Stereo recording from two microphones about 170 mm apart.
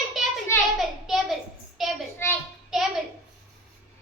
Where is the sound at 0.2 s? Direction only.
Centre (ahead or behind).